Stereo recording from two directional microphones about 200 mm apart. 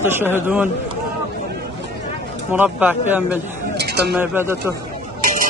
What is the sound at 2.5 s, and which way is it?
Speech, 10° right (ahead or behind).